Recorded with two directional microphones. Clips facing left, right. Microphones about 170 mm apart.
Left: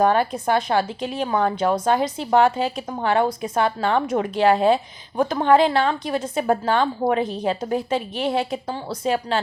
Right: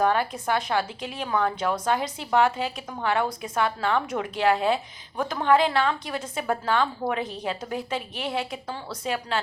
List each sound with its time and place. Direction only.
0.0 s a woman's voice: 30° left (ahead or behind)